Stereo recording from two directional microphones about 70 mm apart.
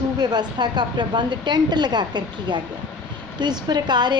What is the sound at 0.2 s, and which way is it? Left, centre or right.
A woman's voice, right.